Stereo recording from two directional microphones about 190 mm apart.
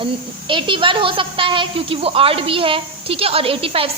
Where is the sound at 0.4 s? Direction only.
25° right (ahead or behind).